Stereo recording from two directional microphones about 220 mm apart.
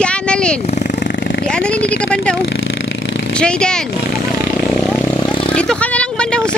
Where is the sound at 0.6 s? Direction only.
30° left (ahead or behind).